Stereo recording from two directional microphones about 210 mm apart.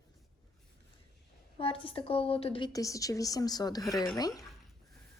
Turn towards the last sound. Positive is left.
turn(degrees=15)  # may be behind; listen again after turning